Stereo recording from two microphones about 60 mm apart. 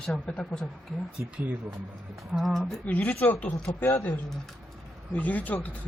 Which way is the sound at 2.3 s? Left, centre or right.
Centre.